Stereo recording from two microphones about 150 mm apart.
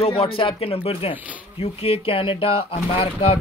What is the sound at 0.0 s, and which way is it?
Speech, 40° left (ahead or behind).